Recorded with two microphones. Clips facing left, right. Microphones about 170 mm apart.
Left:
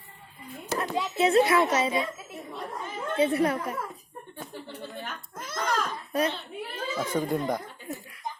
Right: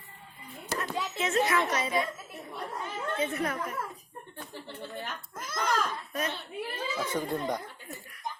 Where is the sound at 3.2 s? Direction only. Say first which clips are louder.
Left 9 dB; 35° left (ahead or behind).